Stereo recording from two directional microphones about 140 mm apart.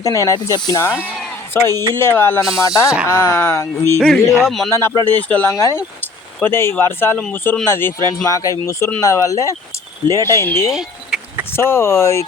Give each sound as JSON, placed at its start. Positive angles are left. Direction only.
{"t": 0.0, "sound": "speech", "side_deg": 25}
{"t": 1.5, "sound": "speech", "side_deg": 15}
{"t": 4.0, "sound": "speech", "side_deg": 0}
{"t": 4.7, "sound": "speech", "side_deg": 15}
{"t": 10.7, "sound": "a sound", "side_deg": -5}
{"t": 11.5, "sound": "speech", "side_deg": 20}